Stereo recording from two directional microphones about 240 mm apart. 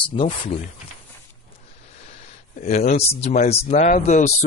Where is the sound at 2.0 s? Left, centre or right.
Left.